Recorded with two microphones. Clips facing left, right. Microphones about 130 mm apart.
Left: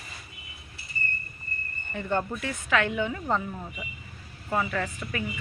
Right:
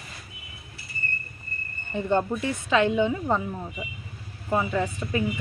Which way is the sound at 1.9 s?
20° right (ahead or behind).